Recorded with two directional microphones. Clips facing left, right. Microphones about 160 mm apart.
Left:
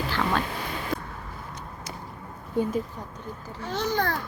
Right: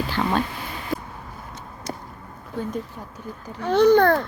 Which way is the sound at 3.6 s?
60° right (ahead or behind).